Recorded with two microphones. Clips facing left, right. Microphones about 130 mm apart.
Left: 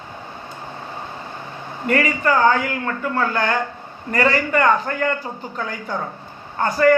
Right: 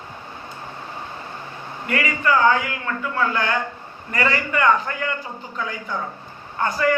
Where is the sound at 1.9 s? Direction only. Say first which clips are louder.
Left 3 dB; 40° left (ahead or behind).